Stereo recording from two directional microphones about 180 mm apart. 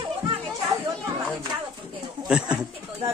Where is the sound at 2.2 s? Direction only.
5° right (ahead or behind).